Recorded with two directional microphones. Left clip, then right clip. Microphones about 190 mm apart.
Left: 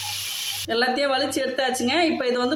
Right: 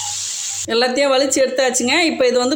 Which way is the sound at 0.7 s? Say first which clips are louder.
Right 6 dB; 35° right (ahead or behind).